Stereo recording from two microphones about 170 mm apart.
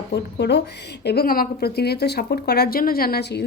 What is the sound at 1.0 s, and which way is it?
A woman's voice, 65° left (ahead or behind).